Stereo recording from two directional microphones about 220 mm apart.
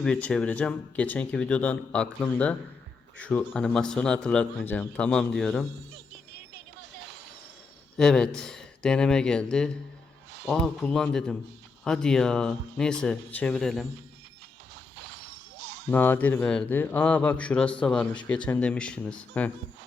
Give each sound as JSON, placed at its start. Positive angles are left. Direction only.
{"t": 0.0, "sound": "speech", "side_deg": 5}
{"t": 7.9, "sound": "speech", "side_deg": 5}
{"t": 14.9, "sound": "a sound", "side_deg": -50}
{"t": 15.9, "sound": "speech", "side_deg": 10}